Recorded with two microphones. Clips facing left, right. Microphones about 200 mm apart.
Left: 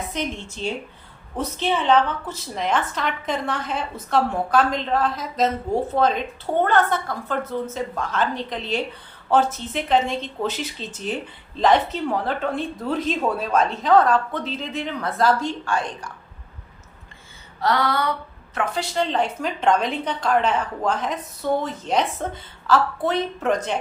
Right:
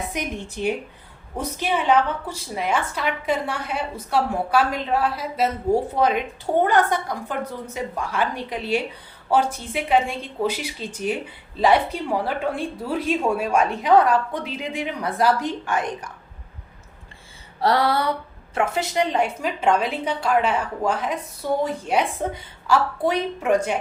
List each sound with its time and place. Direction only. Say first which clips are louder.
0.1 s speech: left 1 dB; 10° right (ahead or behind)
17.6 s a sound: right 2 dB; 30° right (ahead or behind)
18.5 s speech: right 2 dB; 25° right (ahead or behind)